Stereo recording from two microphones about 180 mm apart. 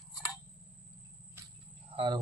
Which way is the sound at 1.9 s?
30° right (ahead or behind).